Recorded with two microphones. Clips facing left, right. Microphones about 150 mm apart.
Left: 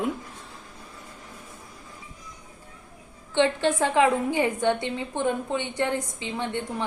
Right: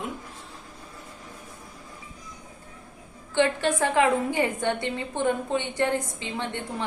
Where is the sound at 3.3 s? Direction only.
20° left (ahead or behind).